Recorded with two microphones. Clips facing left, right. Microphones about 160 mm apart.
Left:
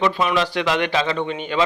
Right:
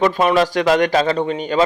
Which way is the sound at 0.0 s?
45° right (ahead or behind).